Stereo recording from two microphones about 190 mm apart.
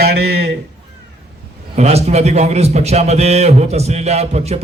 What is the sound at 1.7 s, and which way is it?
A man's voice, 35° right (ahead or behind).